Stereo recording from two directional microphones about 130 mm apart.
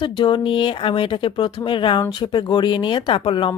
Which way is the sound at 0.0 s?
40° left (ahead or behind).